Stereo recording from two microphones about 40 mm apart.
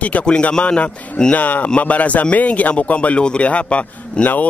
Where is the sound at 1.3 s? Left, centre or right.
Left.